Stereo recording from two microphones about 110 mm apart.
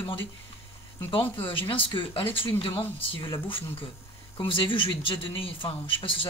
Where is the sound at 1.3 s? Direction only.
50° left (ahead or behind).